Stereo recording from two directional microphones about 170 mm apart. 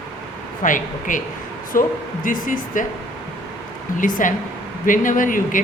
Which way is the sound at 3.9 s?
50° left (ahead or behind).